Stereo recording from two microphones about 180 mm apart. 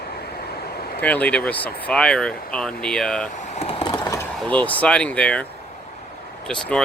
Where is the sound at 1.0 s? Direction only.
10° left (ahead or behind).